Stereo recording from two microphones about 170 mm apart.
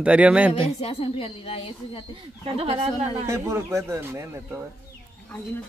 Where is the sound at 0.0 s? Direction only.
5° right (ahead or behind).